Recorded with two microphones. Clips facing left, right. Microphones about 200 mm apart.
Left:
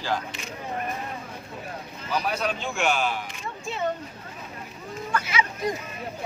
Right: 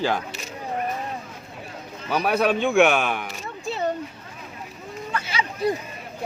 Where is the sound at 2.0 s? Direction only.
60° right (ahead or behind).